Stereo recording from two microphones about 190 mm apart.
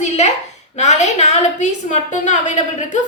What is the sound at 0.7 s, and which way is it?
A woman's voice, 40° left (ahead or behind).